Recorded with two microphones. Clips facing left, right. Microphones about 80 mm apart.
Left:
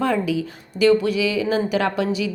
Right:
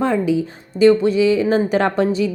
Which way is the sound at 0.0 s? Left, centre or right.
Right.